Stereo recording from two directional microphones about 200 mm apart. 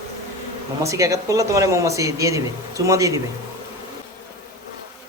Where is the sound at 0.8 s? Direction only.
15° right (ahead or behind).